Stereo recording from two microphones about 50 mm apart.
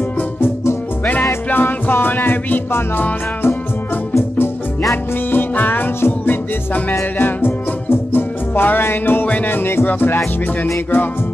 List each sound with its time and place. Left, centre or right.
1.5 s music: left
5.3 s music: left